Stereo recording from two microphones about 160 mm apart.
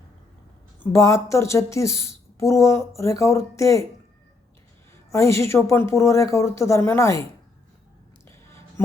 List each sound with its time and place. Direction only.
0.8 s a woman's voice: 20° left (ahead or behind)
5.1 s speech: 20° left (ahead or behind)